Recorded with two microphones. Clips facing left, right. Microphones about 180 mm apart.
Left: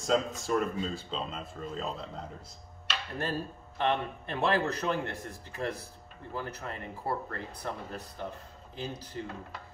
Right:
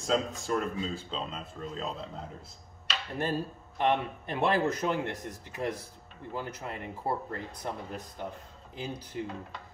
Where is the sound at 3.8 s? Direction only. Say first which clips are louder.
Right 2 dB; 15° right (ahead or behind).